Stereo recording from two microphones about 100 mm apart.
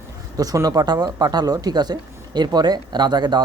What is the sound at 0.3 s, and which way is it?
A man's voice, 35° right (ahead or behind).